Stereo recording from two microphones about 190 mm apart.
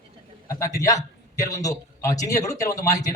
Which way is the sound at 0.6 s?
15° left (ahead or behind).